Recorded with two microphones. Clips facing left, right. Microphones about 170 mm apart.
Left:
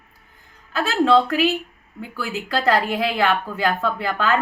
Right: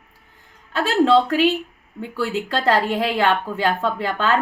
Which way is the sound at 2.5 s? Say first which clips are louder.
Left 1 dB; 30° right (ahead or behind).